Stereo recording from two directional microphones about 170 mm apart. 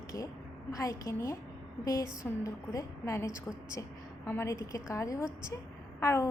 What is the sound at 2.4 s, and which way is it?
A woman's voice, 20° left (ahead or behind).